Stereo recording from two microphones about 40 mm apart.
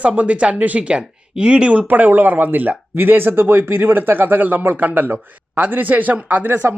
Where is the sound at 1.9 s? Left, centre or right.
Right.